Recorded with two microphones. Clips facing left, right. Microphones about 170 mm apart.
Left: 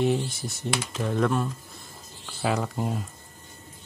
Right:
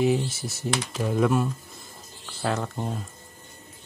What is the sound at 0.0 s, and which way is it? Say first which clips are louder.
Speech: right 2 dB; centre (ahead or behind).